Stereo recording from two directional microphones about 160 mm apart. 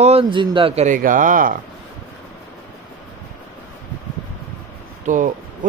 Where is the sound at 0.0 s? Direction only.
35° right (ahead or behind).